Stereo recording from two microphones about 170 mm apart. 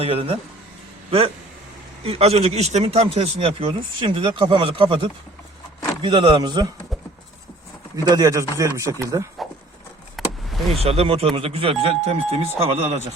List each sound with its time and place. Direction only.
0.0 s speech: 35° right (ahead or behind)
2.0 s speech: 35° right (ahead or behind)
3.7 s speech: 25° right (ahead or behind)
8.0 s speech: 20° right (ahead or behind)
10.2 s vehicle: centre (ahead or behind)
10.8 s speech: 35° right (ahead or behind)